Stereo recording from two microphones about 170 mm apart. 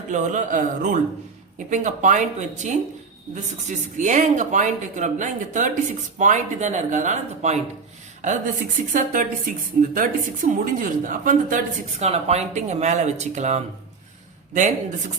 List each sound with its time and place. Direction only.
0.1 s a woman's voice: 45° right (ahead or behind)